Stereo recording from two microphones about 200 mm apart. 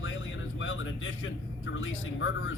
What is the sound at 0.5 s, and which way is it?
Speech, 75° left (ahead or behind).